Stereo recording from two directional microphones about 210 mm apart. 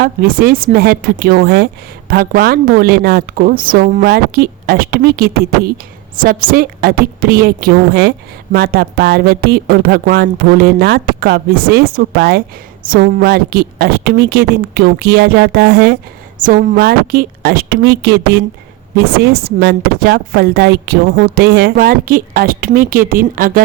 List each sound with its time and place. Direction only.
0.0 s a woman's voice: 45° right (ahead or behind)